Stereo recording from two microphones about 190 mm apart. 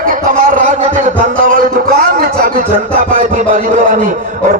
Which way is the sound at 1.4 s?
45° right (ahead or behind).